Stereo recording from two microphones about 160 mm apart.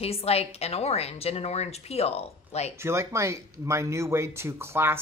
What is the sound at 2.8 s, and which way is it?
Speech, 15° right (ahead or behind).